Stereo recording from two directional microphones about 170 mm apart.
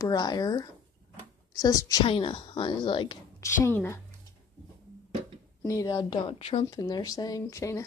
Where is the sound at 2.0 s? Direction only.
30° left (ahead or behind).